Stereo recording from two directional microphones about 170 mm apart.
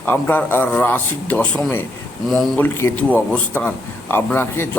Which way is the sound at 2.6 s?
10° left (ahead or behind).